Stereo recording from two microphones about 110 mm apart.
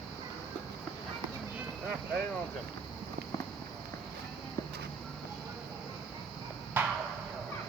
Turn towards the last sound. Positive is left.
turn(degrees=-15)  # may be behind; listen again after turning